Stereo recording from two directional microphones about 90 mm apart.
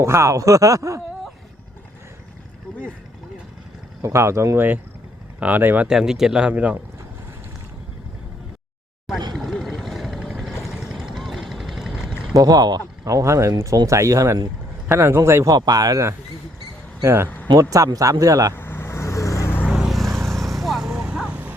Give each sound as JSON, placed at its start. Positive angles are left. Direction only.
{"t": 0.0, "sound": "speech", "side_deg": -30}
{"t": 4.0, "sound": "a man's voice", "side_deg": -30}
{"t": 5.9, "sound": "speech", "side_deg": -5}
{"t": 9.3, "sound": "vehicle", "side_deg": 0}
{"t": 12.3, "sound": "speech", "side_deg": -45}
{"t": 13.1, "sound": "a man's voice", "side_deg": -35}
{"t": 15.5, "sound": "speech", "side_deg": -45}
{"t": 17.2, "sound": "a sound", "side_deg": 20}
{"t": 17.5, "sound": "speech", "side_deg": -40}
{"t": 18.5, "sound": "vehicle", "side_deg": 25}
{"t": 19.6, "sound": "vehicle", "side_deg": -5}